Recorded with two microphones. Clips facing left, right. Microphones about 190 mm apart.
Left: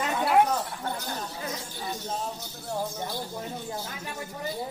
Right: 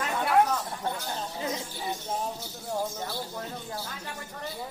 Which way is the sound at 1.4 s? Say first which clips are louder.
Right 2 dB; 15° right (ahead or behind).